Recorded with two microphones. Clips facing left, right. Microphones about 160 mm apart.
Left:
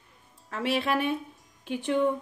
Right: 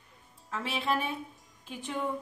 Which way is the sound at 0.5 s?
70° left (ahead or behind).